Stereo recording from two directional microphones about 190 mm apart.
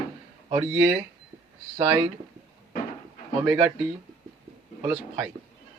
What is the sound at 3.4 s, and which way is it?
Speech, 15° right (ahead or behind).